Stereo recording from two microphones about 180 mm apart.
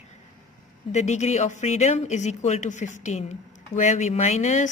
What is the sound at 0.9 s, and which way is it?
Speech, 40° left (ahead or behind).